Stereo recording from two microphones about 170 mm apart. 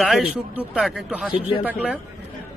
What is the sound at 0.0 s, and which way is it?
A man's voice, 5° right (ahead or behind).